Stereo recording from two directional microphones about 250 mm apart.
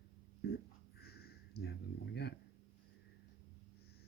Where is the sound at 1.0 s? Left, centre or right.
Left.